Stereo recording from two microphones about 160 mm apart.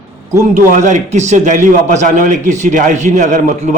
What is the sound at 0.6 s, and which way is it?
A man's voice, 50° right (ahead or behind).